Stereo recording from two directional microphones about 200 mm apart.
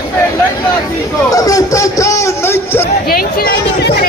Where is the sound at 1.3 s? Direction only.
15° left (ahead or behind).